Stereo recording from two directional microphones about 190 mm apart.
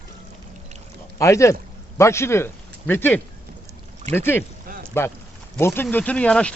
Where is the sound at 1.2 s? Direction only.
15° left (ahead or behind).